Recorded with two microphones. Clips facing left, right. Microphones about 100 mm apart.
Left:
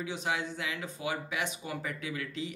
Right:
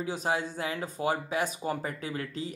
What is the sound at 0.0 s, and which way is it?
A man's voice, 40° right (ahead or behind).